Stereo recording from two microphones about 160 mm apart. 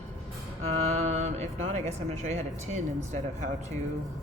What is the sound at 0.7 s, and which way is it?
Speech, 40° right (ahead or behind).